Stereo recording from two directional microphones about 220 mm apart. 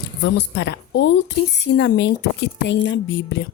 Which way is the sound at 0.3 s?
55° left (ahead or behind).